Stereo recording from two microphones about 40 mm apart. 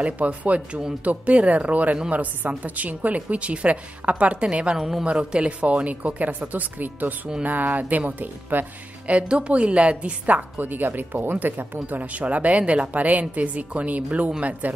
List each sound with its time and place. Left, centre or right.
0.0 s a woman's voice: right
4.7 s speech: centre
5.0 s speech: right
5.9 s speech: right
9.3 s a woman's voice: right